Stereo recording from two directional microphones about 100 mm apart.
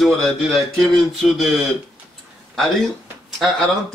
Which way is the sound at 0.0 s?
Centre (ahead or behind).